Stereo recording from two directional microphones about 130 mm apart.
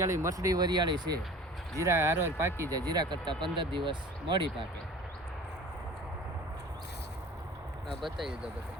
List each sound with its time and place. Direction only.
0.0 s speech: 20° right (ahead or behind)
1.8 s speech: 20° right (ahead or behind); by 4.4 s 40° right (ahead or behind)
8.0 s speech: 5° right (ahead or behind)